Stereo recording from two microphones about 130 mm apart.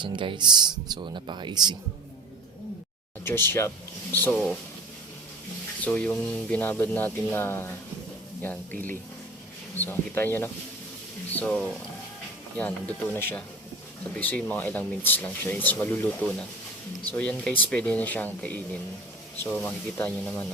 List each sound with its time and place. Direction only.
0.0 s speech: 40° right (ahead or behind)
3.2 s speech: 15° left (ahead or behind)
5.8 s speech: 10° left (ahead or behind)